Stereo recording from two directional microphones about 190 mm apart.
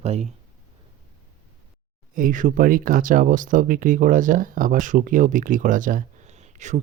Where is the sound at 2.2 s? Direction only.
45° right (ahead or behind).